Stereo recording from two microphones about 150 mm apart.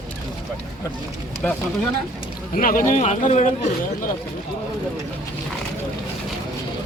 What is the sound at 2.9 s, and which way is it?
Speech, 50° left (ahead or behind).